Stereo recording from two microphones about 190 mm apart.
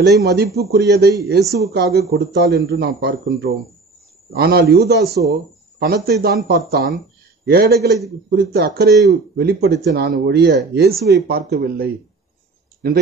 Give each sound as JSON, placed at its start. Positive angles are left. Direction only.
{"t": 0.0, "sound": "a man's voice", "side_deg": -60}